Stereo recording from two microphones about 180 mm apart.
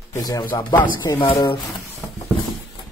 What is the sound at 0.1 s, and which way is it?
Speech, 20° left (ahead or behind).